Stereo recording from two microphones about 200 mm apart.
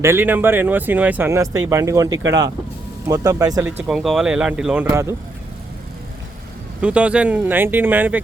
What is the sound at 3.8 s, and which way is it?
Speech, centre (ahead or behind).